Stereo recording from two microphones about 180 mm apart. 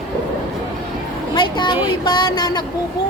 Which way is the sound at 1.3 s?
25° left (ahead or behind).